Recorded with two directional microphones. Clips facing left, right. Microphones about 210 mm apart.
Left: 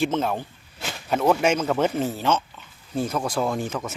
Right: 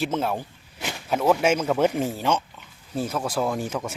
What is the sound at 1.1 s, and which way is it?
Speech, 5° right (ahead or behind).